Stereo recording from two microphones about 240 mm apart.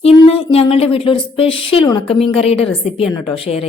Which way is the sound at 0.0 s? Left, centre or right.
Left.